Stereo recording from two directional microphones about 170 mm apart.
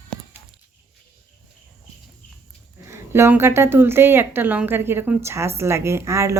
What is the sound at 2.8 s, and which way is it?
A woman's voice, 15° right (ahead or behind).